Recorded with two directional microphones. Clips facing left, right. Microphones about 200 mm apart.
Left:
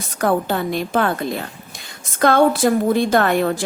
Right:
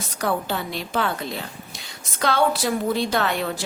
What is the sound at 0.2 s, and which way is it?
A woman's voice, 50° left (ahead or behind).